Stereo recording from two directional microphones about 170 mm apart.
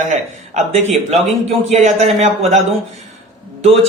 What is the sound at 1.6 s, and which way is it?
Speech, 40° right (ahead or behind).